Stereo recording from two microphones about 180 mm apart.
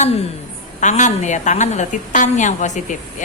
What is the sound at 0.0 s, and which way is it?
Speech, 35° left (ahead or behind).